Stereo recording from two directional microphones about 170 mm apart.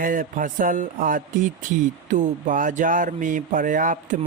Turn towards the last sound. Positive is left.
turn(degrees=-50)  # may be behind; listen again after turning